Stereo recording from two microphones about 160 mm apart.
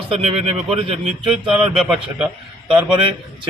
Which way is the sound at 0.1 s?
35° right (ahead or behind).